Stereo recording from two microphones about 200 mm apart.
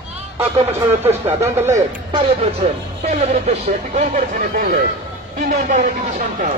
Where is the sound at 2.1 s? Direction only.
25° right (ahead or behind).